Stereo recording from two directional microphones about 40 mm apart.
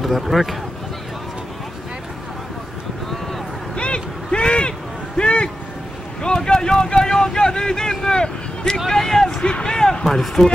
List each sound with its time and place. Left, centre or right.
0.0 s speech: centre
3.7 s a sound: left
6.2 s boat: centre
7.0 s vehicle: centre
9.5 s speech: centre
10.0 s speech: centre